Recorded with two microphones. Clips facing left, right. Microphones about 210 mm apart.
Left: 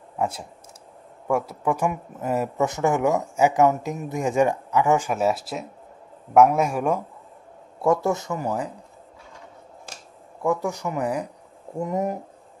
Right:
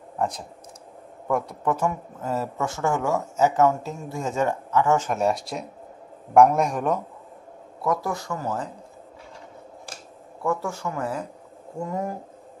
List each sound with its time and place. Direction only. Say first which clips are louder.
0.2 s a man's voice: left 1 dB; 10° left (ahead or behind)
7.8 s speech: left 5 dB; 25° left (ahead or behind)
10.4 s speech: left 2 dB; 15° left (ahead or behind)